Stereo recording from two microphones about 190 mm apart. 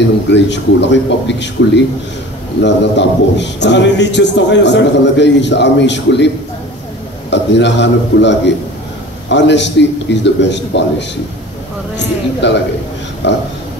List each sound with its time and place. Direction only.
0.3 s a man's voice: 65° left (ahead or behind)
12.4 s a man's voice: 70° left (ahead or behind)